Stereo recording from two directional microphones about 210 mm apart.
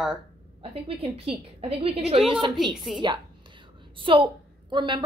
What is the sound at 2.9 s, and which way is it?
Speech, centre (ahead or behind).